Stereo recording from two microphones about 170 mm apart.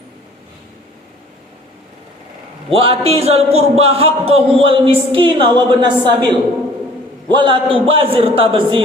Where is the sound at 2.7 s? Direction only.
35° right (ahead or behind).